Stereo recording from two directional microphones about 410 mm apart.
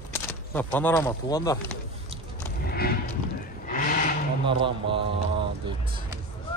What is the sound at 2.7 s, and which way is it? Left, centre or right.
Livestock, left.